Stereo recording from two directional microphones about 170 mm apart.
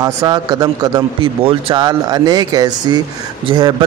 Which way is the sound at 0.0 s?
20° right (ahead or behind).